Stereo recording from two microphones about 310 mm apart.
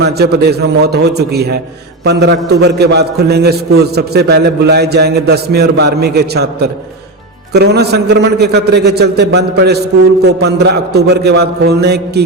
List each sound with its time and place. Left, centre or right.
0.0 s a man's voice: right